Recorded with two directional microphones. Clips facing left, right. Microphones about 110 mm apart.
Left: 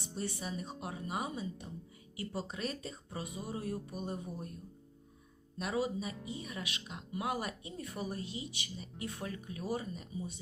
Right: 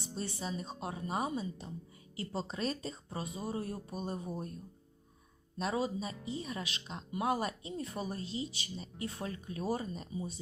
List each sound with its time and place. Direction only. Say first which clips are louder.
0.1 s speech: even; 25° right (ahead or behind)
5.5 s speech: right 1 dB; 30° right (ahead or behind)